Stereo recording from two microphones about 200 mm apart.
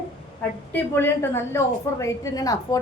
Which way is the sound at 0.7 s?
10° left (ahead or behind).